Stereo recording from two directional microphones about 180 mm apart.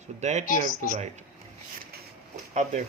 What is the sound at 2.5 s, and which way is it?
Speech, 40° right (ahead or behind).